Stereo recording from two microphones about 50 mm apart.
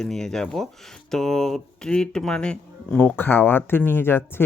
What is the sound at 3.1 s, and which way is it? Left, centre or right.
Speech, left.